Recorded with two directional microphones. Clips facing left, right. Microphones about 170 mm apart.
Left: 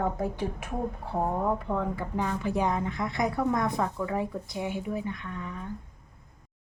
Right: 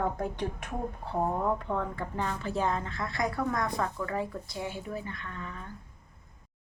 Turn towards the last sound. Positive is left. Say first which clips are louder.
# left 4 dB
turn(degrees=15)  # may be behind; listen again after turning